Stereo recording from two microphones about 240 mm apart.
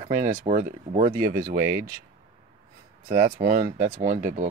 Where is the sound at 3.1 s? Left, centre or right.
Right.